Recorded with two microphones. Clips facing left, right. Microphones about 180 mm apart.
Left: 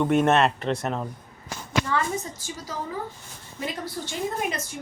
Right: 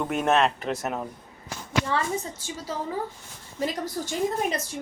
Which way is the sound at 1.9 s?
30° right (ahead or behind).